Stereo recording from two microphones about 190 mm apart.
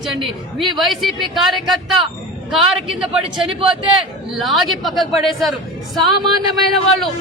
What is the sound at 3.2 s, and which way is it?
Speech, 30° right (ahead or behind).